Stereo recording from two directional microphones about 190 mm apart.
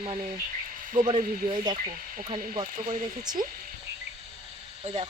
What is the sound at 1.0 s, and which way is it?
Speech, 30° right (ahead or behind).